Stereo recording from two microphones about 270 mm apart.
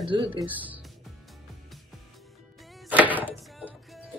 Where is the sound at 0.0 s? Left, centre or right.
Centre.